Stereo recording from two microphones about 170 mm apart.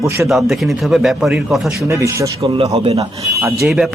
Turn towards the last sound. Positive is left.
turn(degrees=0)  # may be behind; listen again after turning